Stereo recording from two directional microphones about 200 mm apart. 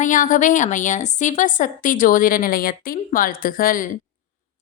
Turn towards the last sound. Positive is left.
turn(degrees=45)  # may be behind; listen again after turning